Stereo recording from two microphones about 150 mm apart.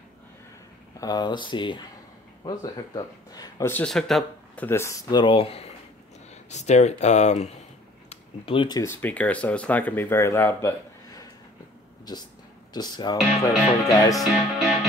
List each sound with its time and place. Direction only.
0.9 s speech: 25° left (ahead or behind)
3.6 s speech: 10° left (ahead or behind)
4.6 s speech: 15° left (ahead or behind)
5.1 s speech: 35° left (ahead or behind)
6.5 s speech: 50° left (ahead or behind)
8.1 s speech: 35° left (ahead or behind)
9.0 s speech: 10° left (ahead or behind)
12.1 s speech: 25° left (ahead or behind)
14.1 s speech: centre (ahead or behind)